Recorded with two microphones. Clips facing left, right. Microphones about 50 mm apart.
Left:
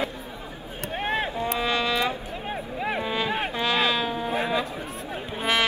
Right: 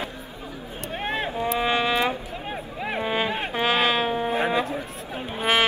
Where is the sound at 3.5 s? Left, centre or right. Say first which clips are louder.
Right 4 dB; right.